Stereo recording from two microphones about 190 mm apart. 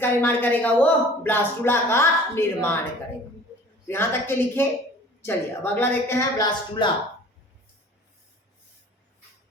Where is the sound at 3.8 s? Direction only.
10° left (ahead or behind).